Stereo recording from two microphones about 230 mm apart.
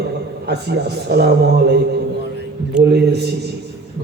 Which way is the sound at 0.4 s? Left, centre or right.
Right.